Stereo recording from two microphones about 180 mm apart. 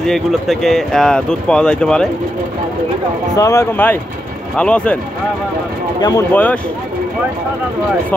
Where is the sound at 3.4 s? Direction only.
15° left (ahead or behind).